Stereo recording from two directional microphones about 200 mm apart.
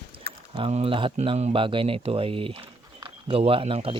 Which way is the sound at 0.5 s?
30° right (ahead or behind).